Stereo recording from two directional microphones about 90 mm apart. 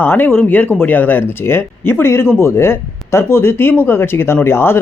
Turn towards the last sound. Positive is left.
turn(degrees=25)  # may be behind; listen again after turning